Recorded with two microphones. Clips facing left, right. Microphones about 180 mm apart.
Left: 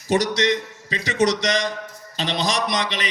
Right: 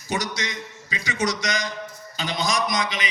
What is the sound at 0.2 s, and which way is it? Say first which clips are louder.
Speech: left 9 dB; 75° left (ahead or behind).